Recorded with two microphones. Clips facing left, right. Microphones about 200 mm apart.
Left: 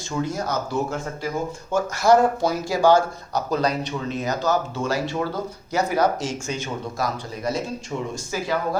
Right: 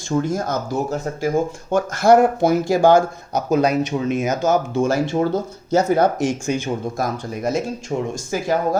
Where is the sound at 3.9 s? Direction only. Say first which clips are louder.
Right 7 dB; 35° right (ahead or behind).